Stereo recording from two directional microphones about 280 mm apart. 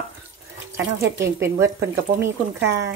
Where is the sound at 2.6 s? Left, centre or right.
Right.